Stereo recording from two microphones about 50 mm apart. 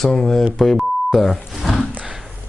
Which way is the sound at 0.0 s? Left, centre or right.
Centre.